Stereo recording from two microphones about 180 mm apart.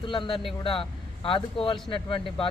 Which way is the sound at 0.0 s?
25° left (ahead or behind).